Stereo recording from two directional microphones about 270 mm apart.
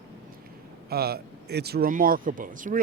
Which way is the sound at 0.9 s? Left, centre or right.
Right.